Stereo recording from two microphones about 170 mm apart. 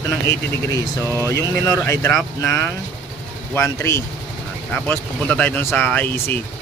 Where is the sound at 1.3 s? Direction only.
20° left (ahead or behind).